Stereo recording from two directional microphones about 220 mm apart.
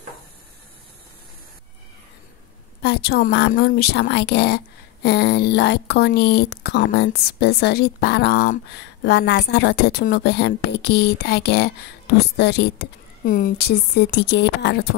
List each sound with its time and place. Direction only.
2.8 s a woman's voice: 45° left (ahead or behind)